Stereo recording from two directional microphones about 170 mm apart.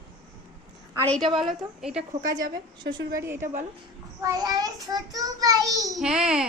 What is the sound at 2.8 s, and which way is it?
Child singing, 25° right (ahead or behind).